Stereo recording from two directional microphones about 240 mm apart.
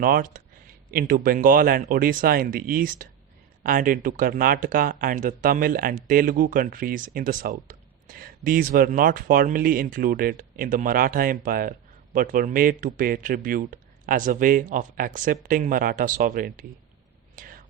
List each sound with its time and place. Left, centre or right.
0.0 s speech: right
17.3 s whispering: right